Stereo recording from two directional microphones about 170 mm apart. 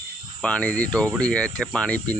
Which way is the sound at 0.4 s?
5° left (ahead or behind).